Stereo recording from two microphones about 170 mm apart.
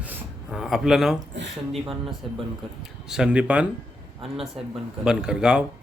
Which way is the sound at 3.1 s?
5° right (ahead or behind).